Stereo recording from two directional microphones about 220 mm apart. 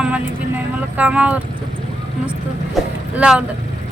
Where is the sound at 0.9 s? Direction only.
5° right (ahead or behind).